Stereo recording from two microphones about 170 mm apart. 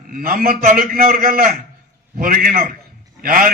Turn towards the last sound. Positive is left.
turn(degrees=-55)  # may be behind; listen again after turning